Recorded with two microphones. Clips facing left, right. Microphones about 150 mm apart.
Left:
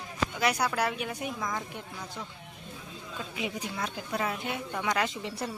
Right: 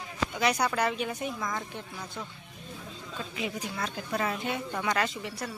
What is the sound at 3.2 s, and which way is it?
A woman's voice, 15° left (ahead or behind).